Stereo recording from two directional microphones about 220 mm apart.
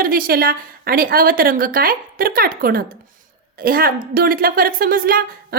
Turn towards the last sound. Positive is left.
turn(degrees=-40)  # may be behind; listen again after turning